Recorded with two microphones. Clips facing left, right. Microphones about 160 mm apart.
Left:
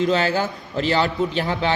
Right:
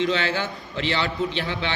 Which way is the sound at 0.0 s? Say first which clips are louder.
Left 4 dB; 40° left (ahead or behind).